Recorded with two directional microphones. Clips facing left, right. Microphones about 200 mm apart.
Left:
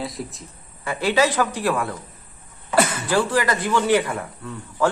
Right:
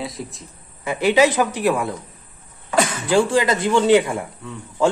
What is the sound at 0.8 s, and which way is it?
Speech, 20° right (ahead or behind).